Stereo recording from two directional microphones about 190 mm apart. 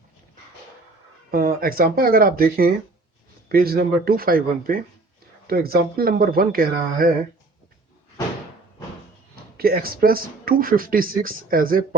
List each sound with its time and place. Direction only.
1.3 s speech: 50° right (ahead or behind)
9.3 s speech: 50° right (ahead or behind)